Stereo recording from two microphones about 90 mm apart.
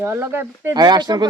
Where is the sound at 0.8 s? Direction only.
50° right (ahead or behind).